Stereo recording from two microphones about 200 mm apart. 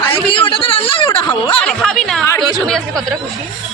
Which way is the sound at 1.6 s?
Centre (ahead or behind).